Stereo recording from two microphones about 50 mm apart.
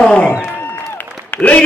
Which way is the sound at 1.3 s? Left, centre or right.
Left.